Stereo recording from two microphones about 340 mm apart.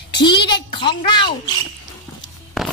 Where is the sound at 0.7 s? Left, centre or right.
Centre.